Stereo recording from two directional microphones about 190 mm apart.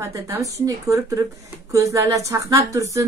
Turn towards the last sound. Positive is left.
turn(degrees=-15)  # may be behind; listen again after turning